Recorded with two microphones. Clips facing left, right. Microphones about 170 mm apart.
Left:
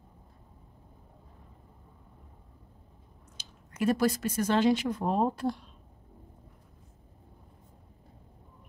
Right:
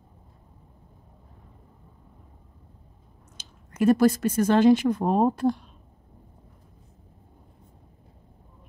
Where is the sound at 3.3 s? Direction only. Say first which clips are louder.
Right 6 dB; 50° right (ahead or behind).